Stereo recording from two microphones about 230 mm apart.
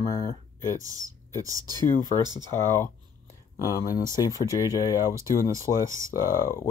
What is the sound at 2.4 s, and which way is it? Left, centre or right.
Speech, centre.